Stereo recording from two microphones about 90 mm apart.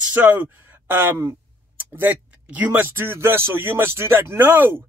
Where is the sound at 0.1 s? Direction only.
15° right (ahead or behind).